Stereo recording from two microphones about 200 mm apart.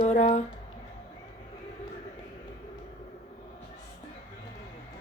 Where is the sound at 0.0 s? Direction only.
35° left (ahead or behind).